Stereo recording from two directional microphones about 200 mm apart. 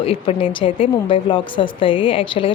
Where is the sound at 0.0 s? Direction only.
30° left (ahead or behind).